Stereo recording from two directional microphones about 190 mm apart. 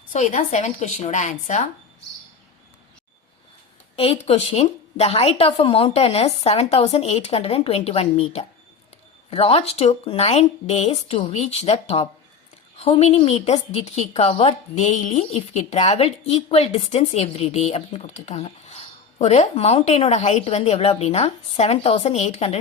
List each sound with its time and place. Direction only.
0.1 s a woman's voice: 40° left (ahead or behind)
3.9 s a woman's voice: 30° left (ahead or behind)